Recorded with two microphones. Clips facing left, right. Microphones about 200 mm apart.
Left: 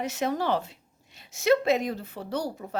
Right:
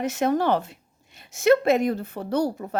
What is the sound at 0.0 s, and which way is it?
A woman's voice, 50° right (ahead or behind).